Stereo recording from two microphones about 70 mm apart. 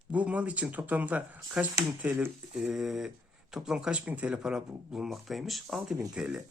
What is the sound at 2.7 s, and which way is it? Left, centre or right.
Speech, centre.